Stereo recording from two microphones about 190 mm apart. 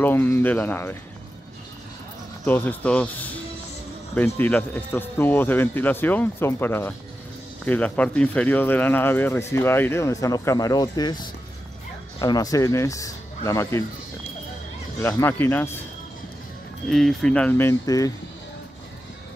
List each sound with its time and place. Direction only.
0.0 s speech: 10° left (ahead or behind)
2.4 s speech: 10° left (ahead or behind)
4.4 s speech: 10° left (ahead or behind)
15.0 s speech: 15° left (ahead or behind)
16.9 s speech: centre (ahead or behind); by 18.1 s 20° left (ahead or behind)